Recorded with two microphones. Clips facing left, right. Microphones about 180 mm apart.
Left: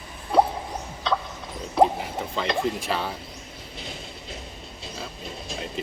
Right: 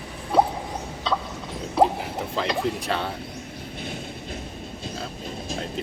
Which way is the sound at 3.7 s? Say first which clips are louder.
Right 4 dB; 55° right (ahead or behind).